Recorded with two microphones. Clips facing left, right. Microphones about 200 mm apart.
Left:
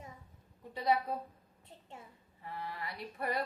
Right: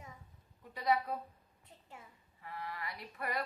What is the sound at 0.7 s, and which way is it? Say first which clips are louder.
Speech: left 1 dB; 25° left (ahead or behind).